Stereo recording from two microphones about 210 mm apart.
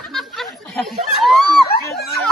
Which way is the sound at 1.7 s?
50° left (ahead or behind).